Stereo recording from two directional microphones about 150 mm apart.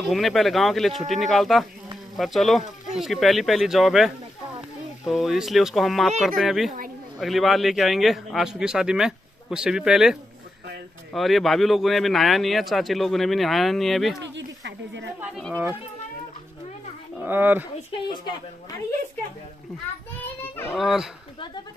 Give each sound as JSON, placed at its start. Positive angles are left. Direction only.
{"t": 0.0, "sound": "a man's voice", "side_deg": 0}
{"t": 11.1, "sound": "a man's voice", "side_deg": 0}
{"t": 15.5, "sound": "speech", "side_deg": -10}
{"t": 17.2, "sound": "speech", "side_deg": -15}
{"t": 18.0, "sound": "a woman's voice", "side_deg": 30}
{"t": 20.7, "sound": "a man's voice", "side_deg": 0}